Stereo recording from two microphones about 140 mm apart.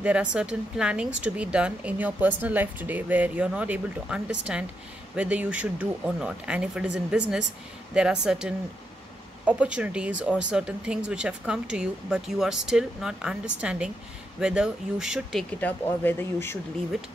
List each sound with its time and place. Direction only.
0.0 s speech: 10° right (ahead or behind)
15.6 s speech: 15° left (ahead or behind)